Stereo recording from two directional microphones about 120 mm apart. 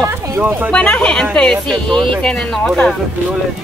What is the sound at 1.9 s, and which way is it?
Speech, 45° right (ahead or behind).